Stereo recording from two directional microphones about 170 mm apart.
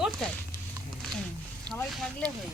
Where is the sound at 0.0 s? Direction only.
5° left (ahead or behind).